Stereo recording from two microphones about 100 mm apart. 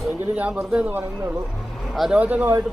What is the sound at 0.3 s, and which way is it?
Speech, 15° right (ahead or behind).